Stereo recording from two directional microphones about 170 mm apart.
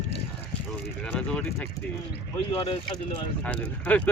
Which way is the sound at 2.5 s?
30° left (ahead or behind).